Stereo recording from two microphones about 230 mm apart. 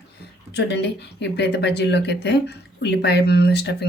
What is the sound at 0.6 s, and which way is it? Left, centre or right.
Speech, left.